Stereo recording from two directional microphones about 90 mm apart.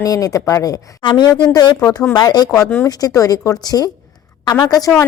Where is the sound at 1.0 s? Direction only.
60° left (ahead or behind).